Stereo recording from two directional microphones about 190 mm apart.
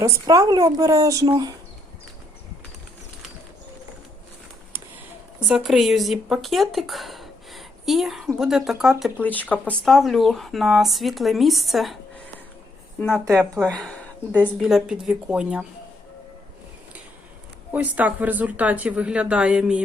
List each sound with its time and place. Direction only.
0.0 s speech: 20° right (ahead or behind)
5.5 s speech: centre (ahead or behind)
13.0 s speech: 10° left (ahead or behind)
13.2 s speech: 15° right (ahead or behind)
13.6 s speech: centre (ahead or behind)
17.7 s speech: 10° right (ahead or behind)